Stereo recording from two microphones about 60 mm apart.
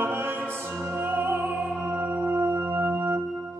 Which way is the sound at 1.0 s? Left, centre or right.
Right.